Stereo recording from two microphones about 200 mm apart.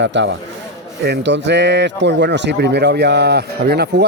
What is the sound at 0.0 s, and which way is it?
Speech, 60° right (ahead or behind).